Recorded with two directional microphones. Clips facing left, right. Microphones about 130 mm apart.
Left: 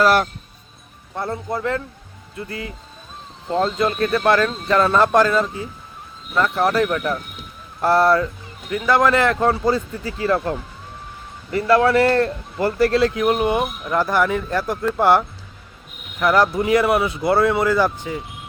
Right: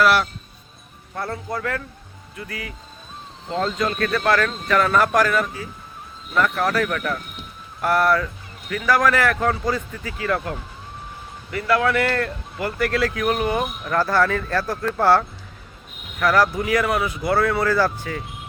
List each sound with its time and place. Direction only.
0.0 s speech: 45° left (ahead or behind)
1.1 s speech: 25° left (ahead or behind)
3.8 s a man's voice: 25° left (ahead or behind)
16.2 s speech: 20° left (ahead or behind)